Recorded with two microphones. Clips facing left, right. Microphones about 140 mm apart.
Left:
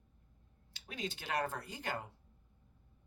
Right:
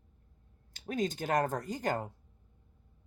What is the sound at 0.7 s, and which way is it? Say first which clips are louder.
Speech: right 10 dB; 45° right (ahead or behind).